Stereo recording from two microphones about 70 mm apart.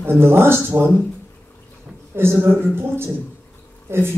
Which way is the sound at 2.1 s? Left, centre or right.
Right.